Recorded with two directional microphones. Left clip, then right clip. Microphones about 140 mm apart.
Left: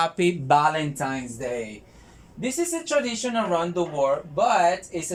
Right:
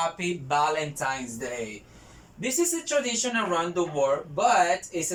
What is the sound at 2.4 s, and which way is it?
Speech, 25° left (ahead or behind).